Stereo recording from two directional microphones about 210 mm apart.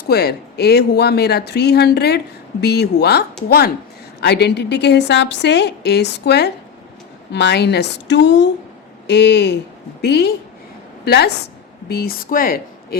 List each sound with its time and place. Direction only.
0.0 s a woman's voice: 50° left (ahead or behind)